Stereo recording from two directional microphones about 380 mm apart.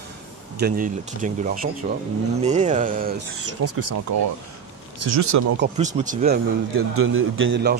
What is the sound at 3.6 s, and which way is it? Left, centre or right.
Speech, right.